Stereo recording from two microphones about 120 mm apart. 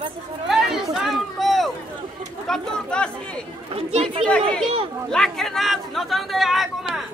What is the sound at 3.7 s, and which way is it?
Chatter, 60° right (ahead or behind).